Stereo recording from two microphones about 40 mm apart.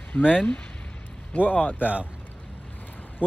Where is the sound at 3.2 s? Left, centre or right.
Right.